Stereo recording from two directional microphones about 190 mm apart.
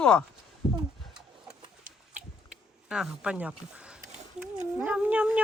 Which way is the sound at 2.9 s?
5° right (ahead or behind).